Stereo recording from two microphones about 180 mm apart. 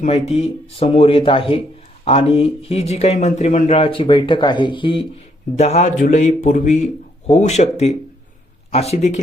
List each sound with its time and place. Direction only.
0.0 s speech: 35° left (ahead or behind)